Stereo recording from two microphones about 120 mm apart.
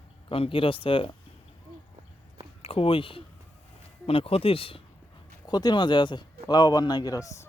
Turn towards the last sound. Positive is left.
turn(degrees=25)  # may be behind; listen again after turning